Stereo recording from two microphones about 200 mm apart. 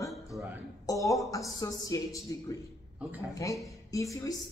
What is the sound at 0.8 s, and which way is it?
A woman's voice, 15° left (ahead or behind).